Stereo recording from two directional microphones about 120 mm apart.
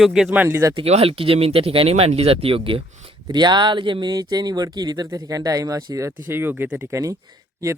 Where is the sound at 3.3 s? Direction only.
35° right (ahead or behind); by 6.9 s 15° right (ahead or behind).